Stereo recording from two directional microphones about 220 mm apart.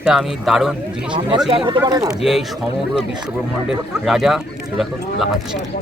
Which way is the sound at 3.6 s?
Centre (ahead or behind).